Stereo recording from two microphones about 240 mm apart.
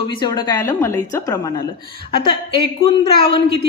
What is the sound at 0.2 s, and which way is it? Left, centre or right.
A woman's voice, centre.